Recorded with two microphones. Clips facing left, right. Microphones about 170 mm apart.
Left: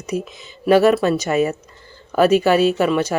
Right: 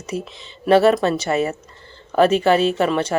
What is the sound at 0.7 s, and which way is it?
Speech, 30° right (ahead or behind).